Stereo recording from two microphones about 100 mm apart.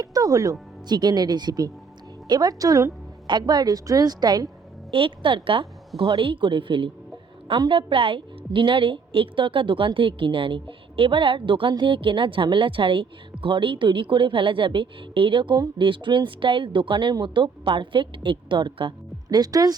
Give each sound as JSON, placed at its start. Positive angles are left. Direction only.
{"t": 0.0, "sound": "music", "side_deg": -35}
{"t": 0.9, "sound": "a woman's voice", "side_deg": -45}
{"t": 3.2, "sound": "a woman's voice", "side_deg": -45}
{"t": 4.9, "sound": "a woman's voice", "side_deg": -60}